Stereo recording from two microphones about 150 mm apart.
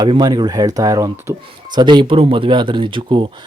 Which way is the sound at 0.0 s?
25° right (ahead or behind).